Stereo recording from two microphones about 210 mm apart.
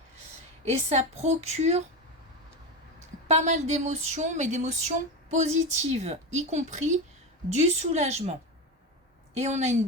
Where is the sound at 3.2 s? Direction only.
35° right (ahead or behind).